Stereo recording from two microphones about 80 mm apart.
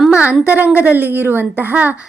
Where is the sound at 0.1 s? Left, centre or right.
Centre.